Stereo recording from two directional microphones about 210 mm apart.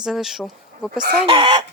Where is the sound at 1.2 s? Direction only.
25° right (ahead or behind).